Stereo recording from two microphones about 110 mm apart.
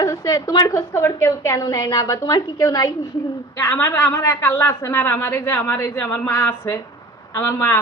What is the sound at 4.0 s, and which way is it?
A man's voice, 15° left (ahead or behind).